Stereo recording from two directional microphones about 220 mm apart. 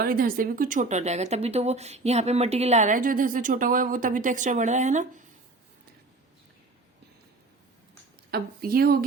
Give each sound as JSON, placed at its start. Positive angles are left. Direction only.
{"t": 0.0, "sound": "speech", "side_deg": -40}
{"t": 8.3, "sound": "speech", "side_deg": -45}